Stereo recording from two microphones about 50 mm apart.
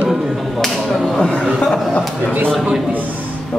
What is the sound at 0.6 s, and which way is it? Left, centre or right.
Speech, centre.